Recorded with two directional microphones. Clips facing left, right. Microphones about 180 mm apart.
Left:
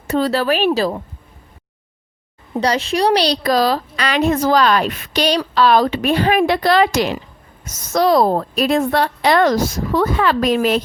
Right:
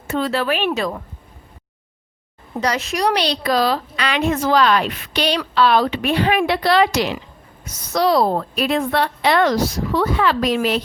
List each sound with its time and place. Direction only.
0.1 s a woman's voice: 40° left (ahead or behind)
2.6 s a woman's voice: 30° left (ahead or behind); by 10.8 s 45° left (ahead or behind)